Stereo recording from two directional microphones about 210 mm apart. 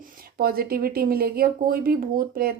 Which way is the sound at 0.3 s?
45° right (ahead or behind).